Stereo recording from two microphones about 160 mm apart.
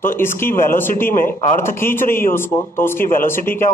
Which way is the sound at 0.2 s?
15° left (ahead or behind).